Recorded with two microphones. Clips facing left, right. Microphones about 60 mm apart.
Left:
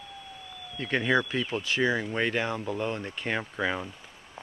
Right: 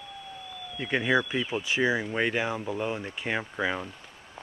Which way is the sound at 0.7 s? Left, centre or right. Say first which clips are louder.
Even; centre.